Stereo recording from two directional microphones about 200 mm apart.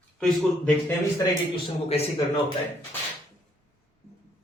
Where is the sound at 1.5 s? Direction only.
30° left (ahead or behind).